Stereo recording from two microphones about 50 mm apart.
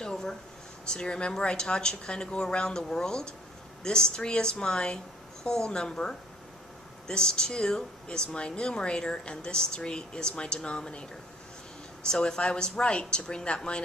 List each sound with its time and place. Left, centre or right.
0.0 s a sound: centre
0.9 s speech: centre
12.0 s a woman's voice: centre